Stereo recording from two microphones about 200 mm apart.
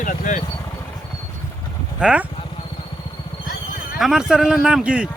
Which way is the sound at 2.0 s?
5° right (ahead or behind).